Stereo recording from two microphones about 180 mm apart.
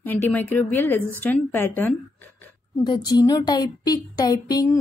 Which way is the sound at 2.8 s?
25° left (ahead or behind).